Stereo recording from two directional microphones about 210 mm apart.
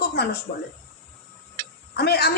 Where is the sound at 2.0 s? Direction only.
50° left (ahead or behind).